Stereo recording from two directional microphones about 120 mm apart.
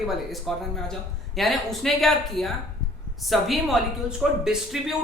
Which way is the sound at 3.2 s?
Centre (ahead or behind).